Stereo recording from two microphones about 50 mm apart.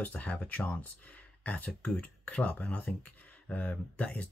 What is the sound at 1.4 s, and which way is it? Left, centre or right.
Speech, left.